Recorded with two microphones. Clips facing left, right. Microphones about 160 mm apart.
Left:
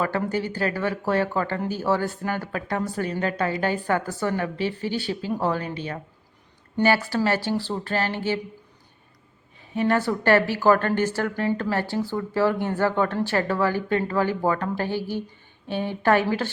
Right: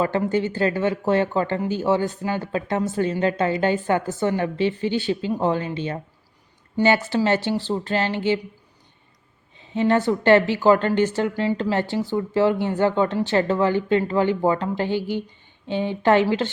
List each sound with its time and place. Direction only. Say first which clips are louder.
0.0 s speech: right 4 dB; 20° right (ahead or behind)
9.6 s speech: right 3 dB; 20° right (ahead or behind)